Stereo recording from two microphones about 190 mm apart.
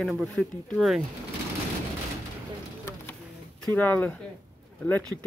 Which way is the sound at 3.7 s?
10° left (ahead or behind).